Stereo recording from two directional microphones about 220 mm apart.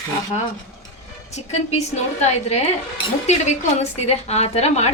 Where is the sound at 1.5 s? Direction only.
30° left (ahead or behind).